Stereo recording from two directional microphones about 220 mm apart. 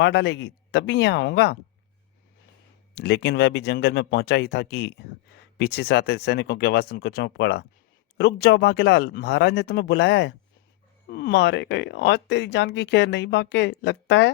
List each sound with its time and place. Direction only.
0.0 s speech: 50° left (ahead or behind)
2.9 s speech: 50° left (ahead or behind)